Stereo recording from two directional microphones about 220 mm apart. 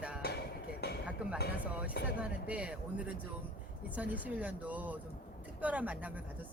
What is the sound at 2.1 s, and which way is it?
Speech, 5° right (ahead or behind).